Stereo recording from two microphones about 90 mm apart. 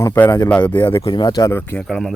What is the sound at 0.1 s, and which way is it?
Speech, 25° left (ahead or behind).